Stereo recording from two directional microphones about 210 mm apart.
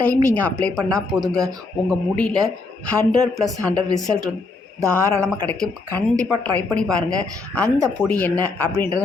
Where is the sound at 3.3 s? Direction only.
Centre (ahead or behind).